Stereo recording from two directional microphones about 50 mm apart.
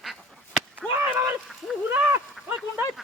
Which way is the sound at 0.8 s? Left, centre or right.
Left.